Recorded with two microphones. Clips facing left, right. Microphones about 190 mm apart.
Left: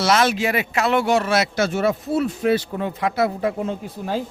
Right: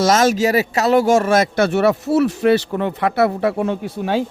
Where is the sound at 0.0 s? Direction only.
45° right (ahead or behind); by 4.2 s 75° right (ahead or behind).